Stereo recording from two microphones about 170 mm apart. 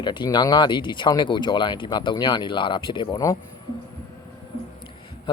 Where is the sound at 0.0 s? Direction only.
25° left (ahead or behind).